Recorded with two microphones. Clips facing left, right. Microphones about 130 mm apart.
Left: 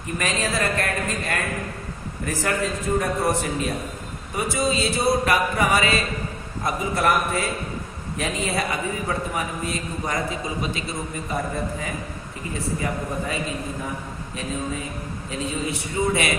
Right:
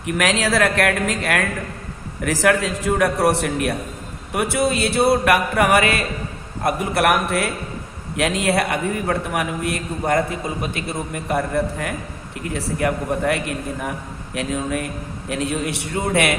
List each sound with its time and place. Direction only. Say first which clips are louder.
0.0 s a man's voice: right 6 dB; 80° right; by 16.3 s 60° right (ahead or behind)